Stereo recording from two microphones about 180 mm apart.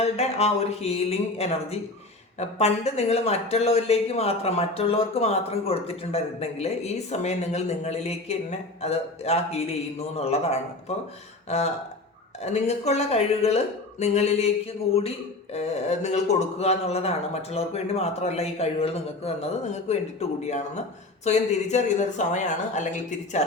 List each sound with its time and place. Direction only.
0.0 s speech: 35° left (ahead or behind)
11.4 s a sound: 40° left (ahead or behind)
12.4 s speech: 35° left (ahead or behind)
15.5 s speech: 40° left (ahead or behind)